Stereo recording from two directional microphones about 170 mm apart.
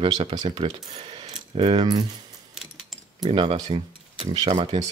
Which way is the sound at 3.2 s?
35° right (ahead or behind).